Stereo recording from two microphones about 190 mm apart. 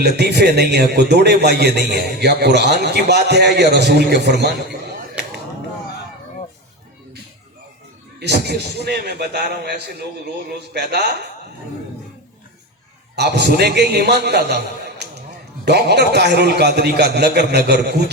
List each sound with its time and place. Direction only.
0.0 s a man's voice: 60° right (ahead or behind)
8.2 s a man's voice: 60° right (ahead or behind)
13.1 s a man's voice: 60° right (ahead or behind)